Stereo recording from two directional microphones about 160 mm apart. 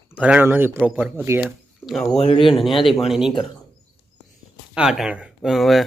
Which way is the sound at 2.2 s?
30° left (ahead or behind).